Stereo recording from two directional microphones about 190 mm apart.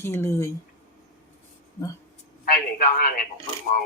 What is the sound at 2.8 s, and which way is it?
Speech, 50° left (ahead or behind).